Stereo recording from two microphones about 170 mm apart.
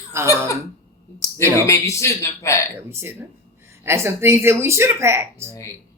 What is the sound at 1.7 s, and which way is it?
Speech, 15° left (ahead or behind).